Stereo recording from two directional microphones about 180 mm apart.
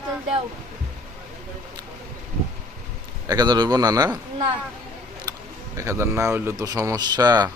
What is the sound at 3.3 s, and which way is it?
Speech, 20° right (ahead or behind).